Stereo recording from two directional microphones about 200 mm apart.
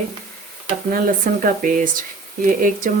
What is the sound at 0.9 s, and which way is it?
Speech, 45° right (ahead or behind).